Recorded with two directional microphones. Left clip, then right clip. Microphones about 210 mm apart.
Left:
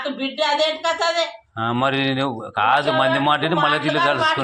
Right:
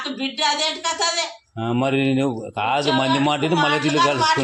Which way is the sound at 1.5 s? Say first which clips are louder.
Left 1 dB; 35° right (ahead or behind).